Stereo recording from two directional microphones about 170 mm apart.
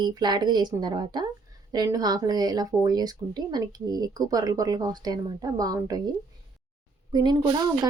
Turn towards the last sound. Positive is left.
turn(degrees=-25)  # may be behind; listen again after turning